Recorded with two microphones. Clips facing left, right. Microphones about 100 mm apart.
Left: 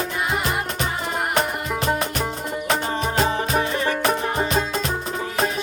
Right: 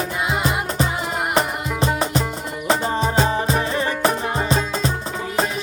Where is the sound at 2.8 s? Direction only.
30° right (ahead or behind).